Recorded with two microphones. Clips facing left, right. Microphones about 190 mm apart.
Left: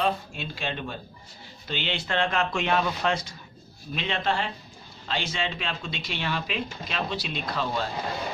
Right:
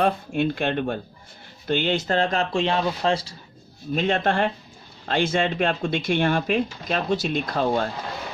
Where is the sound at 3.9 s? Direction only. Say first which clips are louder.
Right 6 dB; 45° right (ahead or behind).